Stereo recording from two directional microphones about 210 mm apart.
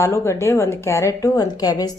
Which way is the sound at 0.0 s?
10° left (ahead or behind).